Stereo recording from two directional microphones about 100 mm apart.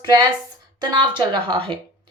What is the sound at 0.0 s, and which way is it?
A woman's voice, 45° right (ahead or behind).